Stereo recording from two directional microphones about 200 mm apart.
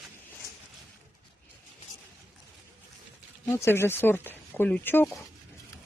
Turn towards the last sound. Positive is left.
turn(degrees=10)  # may be behind; listen again after turning